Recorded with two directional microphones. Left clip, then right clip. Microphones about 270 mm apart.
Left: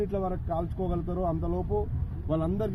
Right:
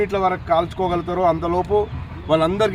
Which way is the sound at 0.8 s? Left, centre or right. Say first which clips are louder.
Right 12 dB; centre.